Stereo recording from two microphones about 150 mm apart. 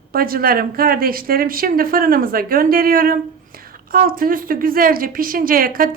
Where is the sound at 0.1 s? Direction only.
80° right.